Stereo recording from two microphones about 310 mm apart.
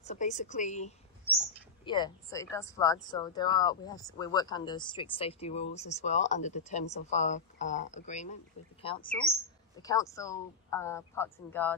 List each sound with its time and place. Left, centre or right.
0.0 s speech: left; by 11.7 s centre